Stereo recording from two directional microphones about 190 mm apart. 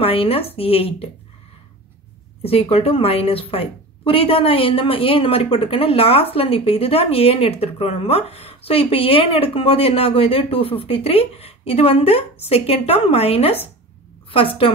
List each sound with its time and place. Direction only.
0.0 s a woman's voice: 30° left (ahead or behind)
2.4 s a woman's voice: 30° left (ahead or behind)